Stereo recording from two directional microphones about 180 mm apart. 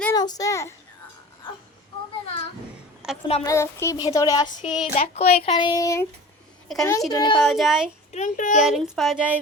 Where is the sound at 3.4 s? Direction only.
15° left (ahead or behind).